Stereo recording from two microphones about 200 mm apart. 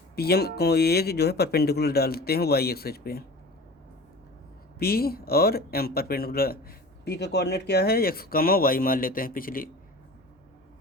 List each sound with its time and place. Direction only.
0.2 s speech: 50° left (ahead or behind)
4.8 s speech: 50° left (ahead or behind)